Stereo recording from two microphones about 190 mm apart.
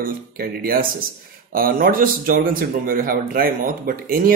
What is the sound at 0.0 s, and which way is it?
Speech, 50° right (ahead or behind).